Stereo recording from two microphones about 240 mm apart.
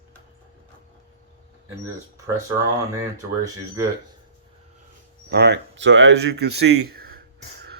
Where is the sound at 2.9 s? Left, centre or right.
Centre.